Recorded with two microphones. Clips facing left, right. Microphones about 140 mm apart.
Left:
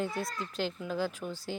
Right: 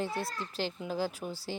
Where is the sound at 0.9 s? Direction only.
35° right (ahead or behind).